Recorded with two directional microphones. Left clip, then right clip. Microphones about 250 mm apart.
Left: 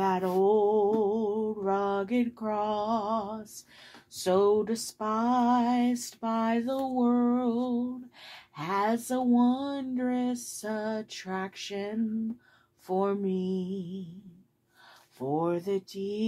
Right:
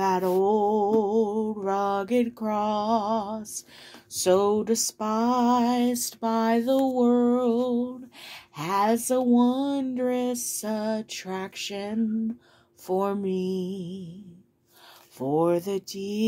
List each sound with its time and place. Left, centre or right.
0.0 s a sound: right
4.1 s music: right
15.1 s music: right